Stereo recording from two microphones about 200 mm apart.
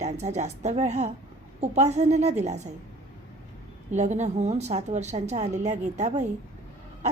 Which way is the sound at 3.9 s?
35° right (ahead or behind).